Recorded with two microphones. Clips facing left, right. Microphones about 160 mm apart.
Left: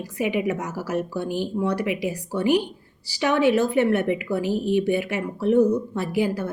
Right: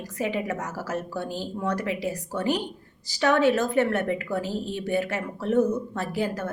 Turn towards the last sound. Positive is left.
turn(degrees=15)  # may be behind; listen again after turning